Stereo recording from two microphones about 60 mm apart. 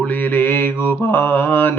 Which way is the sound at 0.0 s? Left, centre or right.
Left.